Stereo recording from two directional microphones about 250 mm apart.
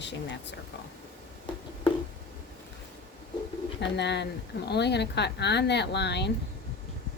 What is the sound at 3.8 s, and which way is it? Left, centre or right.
Speech, left.